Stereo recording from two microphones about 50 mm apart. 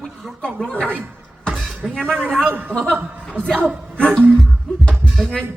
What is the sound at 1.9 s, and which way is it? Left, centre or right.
Speech, centre.